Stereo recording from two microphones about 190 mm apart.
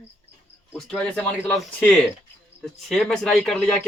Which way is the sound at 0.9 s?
5° left (ahead or behind).